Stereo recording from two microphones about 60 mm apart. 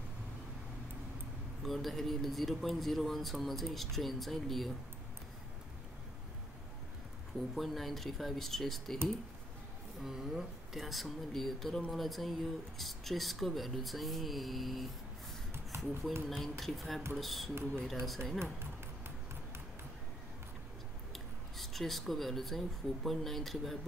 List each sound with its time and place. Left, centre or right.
1.6 s a man's voice: centre
7.5 s a man's voice: centre
10.0 s a man's voice: centre
15.7 s a sound: right
16.3 s a man's voice: centre
18.4 s music: right
21.1 s a sound: centre
23.0 s a man's voice: centre